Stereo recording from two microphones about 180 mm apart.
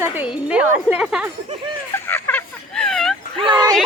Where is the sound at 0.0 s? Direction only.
10° right (ahead or behind).